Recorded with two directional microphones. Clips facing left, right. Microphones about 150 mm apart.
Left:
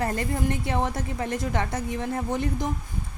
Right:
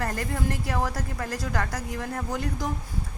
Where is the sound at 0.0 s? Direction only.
20° left (ahead or behind).